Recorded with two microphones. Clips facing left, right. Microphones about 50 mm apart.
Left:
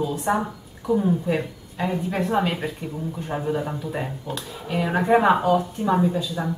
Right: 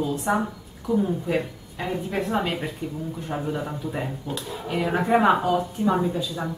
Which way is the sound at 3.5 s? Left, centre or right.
Centre.